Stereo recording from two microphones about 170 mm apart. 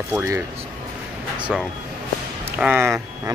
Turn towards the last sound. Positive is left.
turn(degrees=-15)  # may be behind; listen again after turning